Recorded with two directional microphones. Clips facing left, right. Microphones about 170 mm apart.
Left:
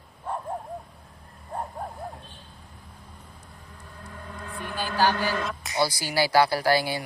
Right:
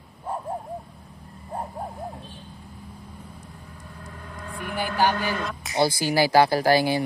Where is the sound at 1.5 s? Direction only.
10° right (ahead or behind).